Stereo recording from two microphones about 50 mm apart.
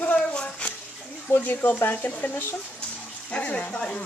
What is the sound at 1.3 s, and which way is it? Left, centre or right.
Speech, left.